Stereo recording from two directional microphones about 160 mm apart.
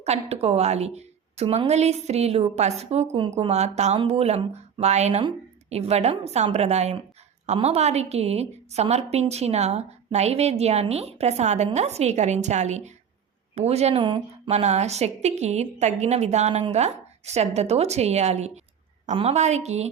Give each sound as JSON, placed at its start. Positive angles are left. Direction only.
{"t": 0.0, "sound": "a woman's voice", "side_deg": -40}
{"t": 14.5, "sound": "a woman's voice", "side_deg": -45}